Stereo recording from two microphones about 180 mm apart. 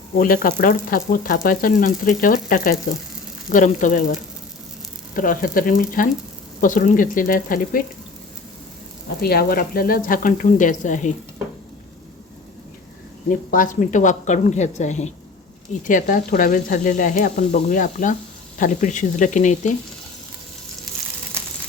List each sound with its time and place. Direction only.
0.2 s frying: 50° left (ahead or behind)
9.2 s frying: 60° left (ahead or behind)
13.3 s frying: 50° left (ahead or behind)